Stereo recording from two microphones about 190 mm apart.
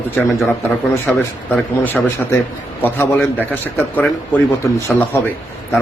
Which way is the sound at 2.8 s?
10° left (ahead or behind).